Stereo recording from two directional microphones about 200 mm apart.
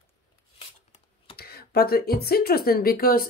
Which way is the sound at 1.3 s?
50° left (ahead or behind).